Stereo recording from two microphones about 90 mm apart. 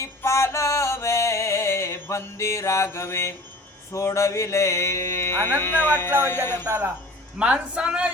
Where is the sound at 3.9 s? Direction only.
35° left (ahead or behind).